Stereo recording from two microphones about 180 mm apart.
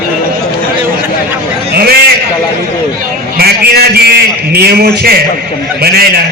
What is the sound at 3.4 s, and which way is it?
A man's voice, 60° right (ahead or behind).